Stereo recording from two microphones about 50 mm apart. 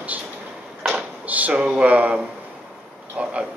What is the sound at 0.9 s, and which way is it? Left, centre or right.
Drawer open or close, right.